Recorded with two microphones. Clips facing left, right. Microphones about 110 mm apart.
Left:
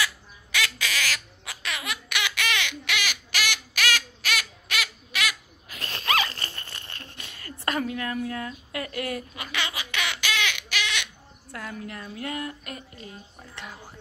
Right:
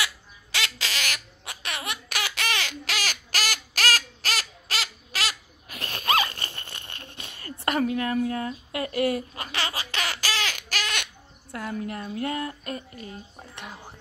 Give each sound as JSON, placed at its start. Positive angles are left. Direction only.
{"t": 0.0, "sound": "bird", "side_deg": -25}
{"t": 9.3, "sound": "a sound", "side_deg": -35}
{"t": 11.5, "sound": "a woman's voice", "side_deg": -30}